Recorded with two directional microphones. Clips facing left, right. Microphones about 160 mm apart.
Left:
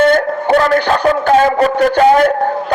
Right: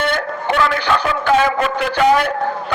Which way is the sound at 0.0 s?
40° left (ahead or behind).